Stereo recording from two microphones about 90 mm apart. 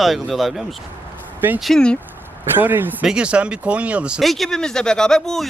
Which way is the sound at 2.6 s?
20° right (ahead or behind).